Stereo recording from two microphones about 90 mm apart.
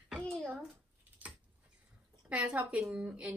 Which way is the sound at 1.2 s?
15° right (ahead or behind).